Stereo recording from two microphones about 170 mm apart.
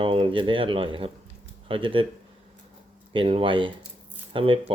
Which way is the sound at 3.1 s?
30° right (ahead or behind).